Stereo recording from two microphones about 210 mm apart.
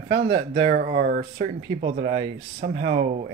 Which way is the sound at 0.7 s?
40° right (ahead or behind).